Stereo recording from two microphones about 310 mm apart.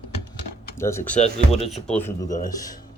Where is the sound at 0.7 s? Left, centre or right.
Centre.